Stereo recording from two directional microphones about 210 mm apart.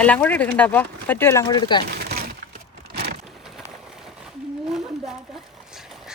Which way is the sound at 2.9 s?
50° right (ahead or behind).